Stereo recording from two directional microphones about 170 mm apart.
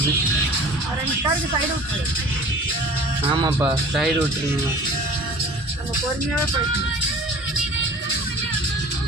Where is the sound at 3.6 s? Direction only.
5° right (ahead or behind).